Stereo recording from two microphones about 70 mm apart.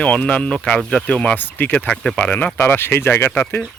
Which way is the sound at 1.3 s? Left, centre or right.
Left.